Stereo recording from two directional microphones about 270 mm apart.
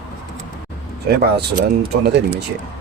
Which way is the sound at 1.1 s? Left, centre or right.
Right.